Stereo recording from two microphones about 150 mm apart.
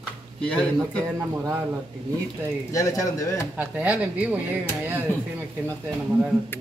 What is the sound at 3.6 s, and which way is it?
Speech, 10° right (ahead or behind).